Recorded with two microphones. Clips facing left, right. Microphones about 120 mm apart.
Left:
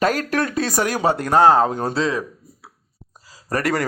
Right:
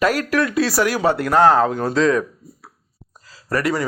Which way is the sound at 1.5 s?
35° left (ahead or behind).